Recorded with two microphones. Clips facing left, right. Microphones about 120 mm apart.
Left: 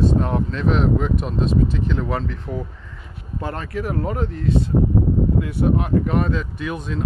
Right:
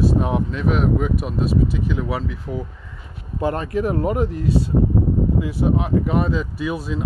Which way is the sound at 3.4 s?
20° right (ahead or behind).